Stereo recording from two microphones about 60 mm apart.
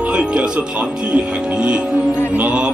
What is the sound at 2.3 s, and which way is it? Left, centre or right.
Mantra, centre.